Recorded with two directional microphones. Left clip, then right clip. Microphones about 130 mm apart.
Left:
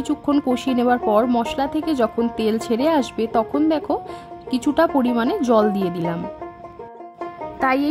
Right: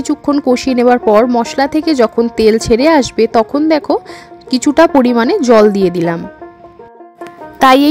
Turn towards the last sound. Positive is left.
turn(degrees=-40)  # may be behind; listen again after turning